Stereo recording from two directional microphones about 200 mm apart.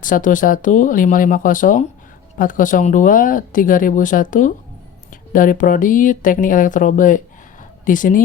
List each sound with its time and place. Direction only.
0.0 s speech: 40° left (ahead or behind)